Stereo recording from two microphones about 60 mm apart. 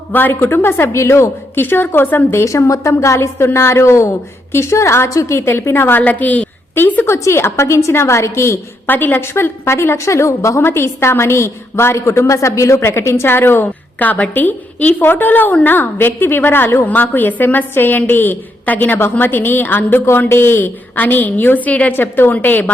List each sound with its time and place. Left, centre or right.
0.1 s a woman's voice: left
1.6 s a woman's voice: left
2.4 s a woman's voice: left
6.0 s a woman's voice: left
7.1 s a woman's voice: left
8.9 s a woman's voice: left
9.2 s a woman's voice: left
10.6 s a woman's voice: left
14.0 s a woman's voice: left
21.9 s a woman's voice: left